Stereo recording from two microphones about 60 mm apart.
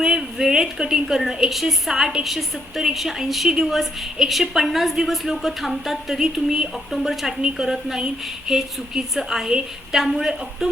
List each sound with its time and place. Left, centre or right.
0.0 s a woman's voice: centre